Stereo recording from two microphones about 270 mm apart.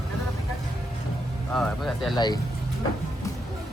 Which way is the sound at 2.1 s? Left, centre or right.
Centre.